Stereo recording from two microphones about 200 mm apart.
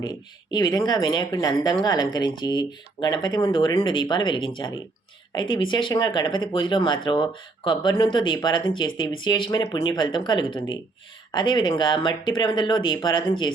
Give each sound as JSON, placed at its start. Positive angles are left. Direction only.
{"t": 0.0, "sound": "speech", "side_deg": 20}